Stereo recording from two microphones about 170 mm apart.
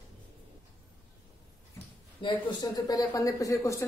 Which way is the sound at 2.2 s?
20° left (ahead or behind).